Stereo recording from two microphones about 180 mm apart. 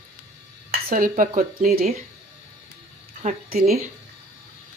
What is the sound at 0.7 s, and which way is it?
Speech, 50° right (ahead or behind).